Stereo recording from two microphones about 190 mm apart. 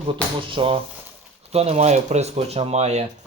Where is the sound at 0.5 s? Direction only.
30° right (ahead or behind).